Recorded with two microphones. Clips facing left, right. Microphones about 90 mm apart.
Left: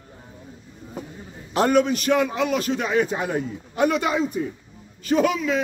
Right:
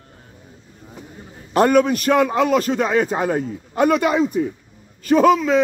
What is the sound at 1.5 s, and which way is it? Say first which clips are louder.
A man's voice: right 4 dB; 50° right (ahead or behind).